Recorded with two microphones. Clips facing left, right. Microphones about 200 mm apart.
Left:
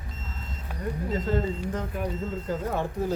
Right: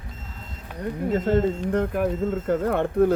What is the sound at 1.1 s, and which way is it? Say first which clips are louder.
Speech: right 7 dB; 55° right (ahead or behind).